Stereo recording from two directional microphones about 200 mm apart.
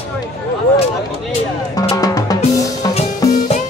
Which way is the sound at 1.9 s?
20° left (ahead or behind).